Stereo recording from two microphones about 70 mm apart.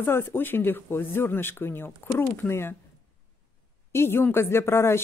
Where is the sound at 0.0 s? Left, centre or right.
Left.